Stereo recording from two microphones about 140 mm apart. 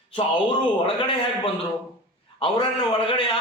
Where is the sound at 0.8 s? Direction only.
40° left (ahead or behind).